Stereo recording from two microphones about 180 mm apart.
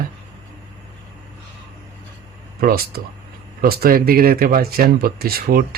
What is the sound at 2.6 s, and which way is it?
Speech, 55° right (ahead or behind).